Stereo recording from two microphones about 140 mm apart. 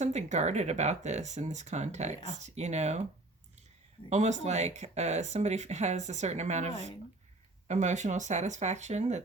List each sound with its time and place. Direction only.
0.0 s speech: 55° right (ahead or behind)
4.1 s speech: 55° right (ahead or behind)